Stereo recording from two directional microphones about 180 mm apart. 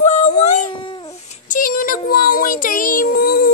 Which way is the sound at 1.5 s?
50° left (ahead or behind).